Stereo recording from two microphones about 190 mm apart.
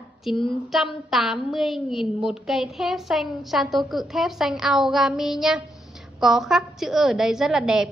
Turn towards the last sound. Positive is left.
turn(degrees=-5)  # may be behind; listen again after turning